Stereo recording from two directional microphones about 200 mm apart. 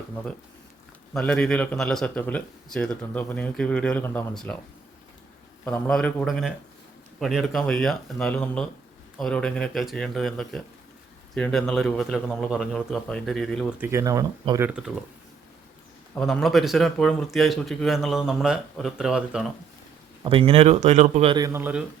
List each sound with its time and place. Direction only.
1.1 s speech: 5° left (ahead or behind)
5.6 s speech: 5° left (ahead or behind)
13.7 s speech: 10° right (ahead or behind)
14.7 s speech: 5° right (ahead or behind)
16.1 s speech: 5° left (ahead or behind)
20.2 s a man's voice: 25° right (ahead or behind)
21.4 s speech: 10° right (ahead or behind)